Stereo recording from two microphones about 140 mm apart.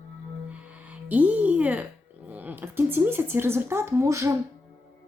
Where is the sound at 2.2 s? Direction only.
10° right (ahead or behind).